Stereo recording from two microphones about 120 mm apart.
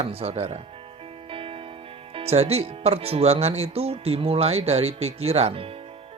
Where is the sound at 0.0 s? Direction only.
55° right (ahead or behind).